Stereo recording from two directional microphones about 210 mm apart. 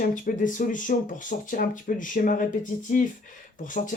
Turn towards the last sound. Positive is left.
turn(degrees=40)  # may be behind; listen again after turning